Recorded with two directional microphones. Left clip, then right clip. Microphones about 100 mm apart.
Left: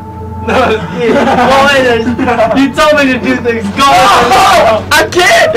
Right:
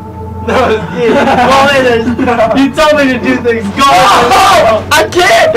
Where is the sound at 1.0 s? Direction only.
Centre (ahead or behind).